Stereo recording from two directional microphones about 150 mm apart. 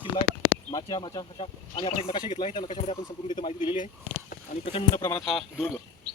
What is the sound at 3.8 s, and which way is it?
Speech, 70° left (ahead or behind).